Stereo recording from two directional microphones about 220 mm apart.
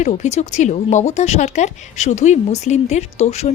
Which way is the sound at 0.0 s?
30° left (ahead or behind).